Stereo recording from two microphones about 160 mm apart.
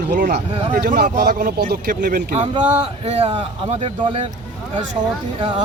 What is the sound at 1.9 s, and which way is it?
Speech, 60° right (ahead or behind).